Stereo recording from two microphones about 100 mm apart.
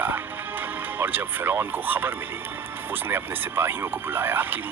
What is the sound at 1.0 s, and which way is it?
Speech, 20° right (ahead or behind).